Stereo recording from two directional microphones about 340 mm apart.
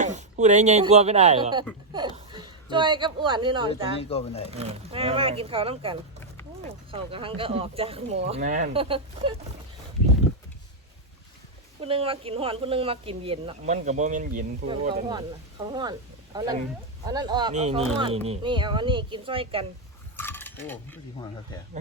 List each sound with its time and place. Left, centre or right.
0.0 s speech: right
11.8 s speech: centre
20.1 s mechanisms: centre